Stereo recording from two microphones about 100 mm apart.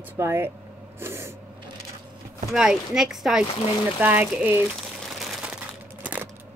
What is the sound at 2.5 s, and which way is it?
Speech, 5° right (ahead or behind).